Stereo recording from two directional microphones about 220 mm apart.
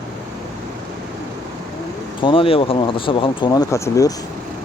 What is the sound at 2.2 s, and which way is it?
Speech, 25° left (ahead or behind).